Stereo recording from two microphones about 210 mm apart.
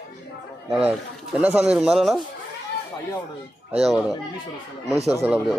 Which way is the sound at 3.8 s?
Centre (ahead or behind).